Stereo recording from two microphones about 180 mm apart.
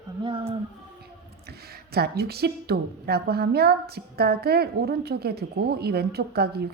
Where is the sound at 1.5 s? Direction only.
60° right (ahead or behind).